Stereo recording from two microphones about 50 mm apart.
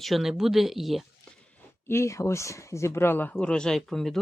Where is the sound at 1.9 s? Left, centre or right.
Left.